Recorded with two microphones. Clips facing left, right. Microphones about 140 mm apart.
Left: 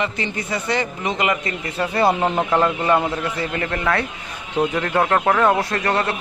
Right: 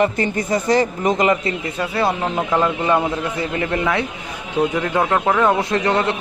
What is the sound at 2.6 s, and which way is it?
Speech, 15° right (ahead or behind).